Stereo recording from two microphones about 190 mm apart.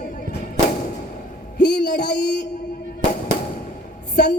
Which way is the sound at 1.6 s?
60° left (ahead or behind).